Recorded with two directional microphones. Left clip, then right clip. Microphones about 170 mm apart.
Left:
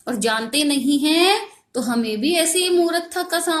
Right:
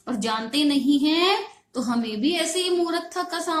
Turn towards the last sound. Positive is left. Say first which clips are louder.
# left 5 dB
turn(degrees=30)  # may be behind; listen again after turning